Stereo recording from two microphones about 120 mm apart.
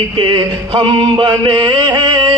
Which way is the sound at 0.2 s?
40° right (ahead or behind).